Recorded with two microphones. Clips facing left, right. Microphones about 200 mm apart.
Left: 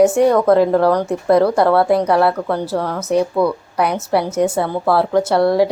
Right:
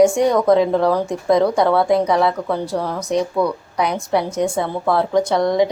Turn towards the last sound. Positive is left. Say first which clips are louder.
# left 2 dB
turn(degrees=5)  # may be behind; listen again after turning